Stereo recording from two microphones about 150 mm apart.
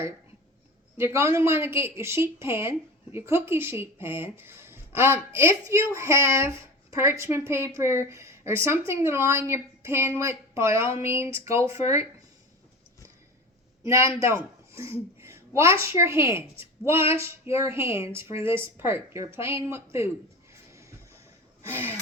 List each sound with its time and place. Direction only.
0.9 s a woman's voice: 15° right (ahead or behind)
13.8 s a woman's voice: 20° right (ahead or behind)
20.5 s music: 20° right (ahead or behind)
21.6 s a sound: 15° right (ahead or behind)